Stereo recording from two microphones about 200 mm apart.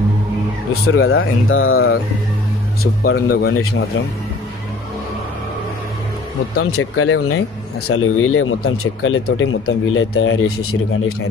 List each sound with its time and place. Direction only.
0.8 s speech: 90° left
2.8 s speech: 50° left (ahead or behind)
6.8 s speech: 90° left